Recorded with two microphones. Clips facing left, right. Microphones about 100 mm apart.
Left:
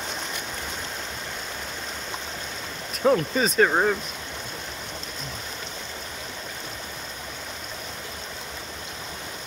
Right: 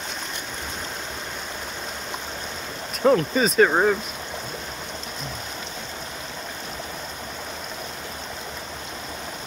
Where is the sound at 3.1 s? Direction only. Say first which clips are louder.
Right 2 dB; centre (ahead or behind).